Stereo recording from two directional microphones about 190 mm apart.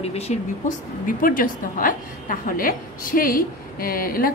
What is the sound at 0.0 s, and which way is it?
A woman's voice, 35° left (ahead or behind).